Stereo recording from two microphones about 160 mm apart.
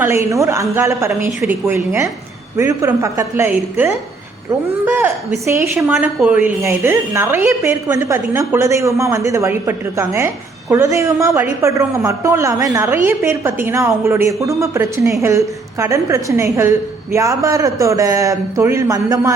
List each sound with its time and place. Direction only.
0.0 s a woman's voice: 15° right (ahead or behind)